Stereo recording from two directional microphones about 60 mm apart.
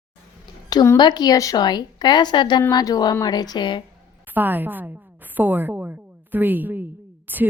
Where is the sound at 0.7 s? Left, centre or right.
Left.